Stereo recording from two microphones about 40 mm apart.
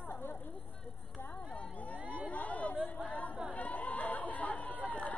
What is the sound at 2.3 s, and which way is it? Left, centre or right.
Chatter, left.